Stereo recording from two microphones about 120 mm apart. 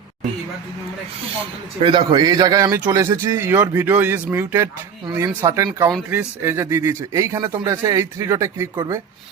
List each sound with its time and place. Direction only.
1.8 s a man's voice: 45° right (ahead or behind); by 8.7 s 25° right (ahead or behind)